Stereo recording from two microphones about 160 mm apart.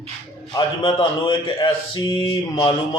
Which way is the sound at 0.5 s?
30° left (ahead or behind).